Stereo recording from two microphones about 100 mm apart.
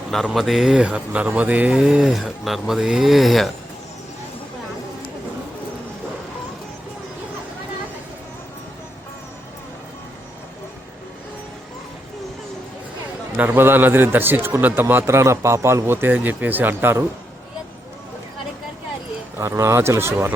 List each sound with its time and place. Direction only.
0.3 s speech: centre (ahead or behind)
13.3 s a man's voice: 20° right (ahead or behind)
19.4 s a man's voice: 30° right (ahead or behind)